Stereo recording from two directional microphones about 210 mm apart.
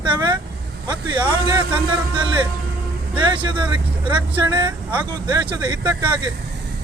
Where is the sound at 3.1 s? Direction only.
20° right (ahead or behind).